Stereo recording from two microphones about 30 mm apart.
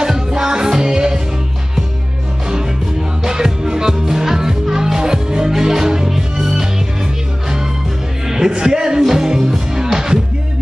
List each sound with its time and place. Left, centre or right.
0.0 s music: right
3.3 s music: right
8.3 s music: right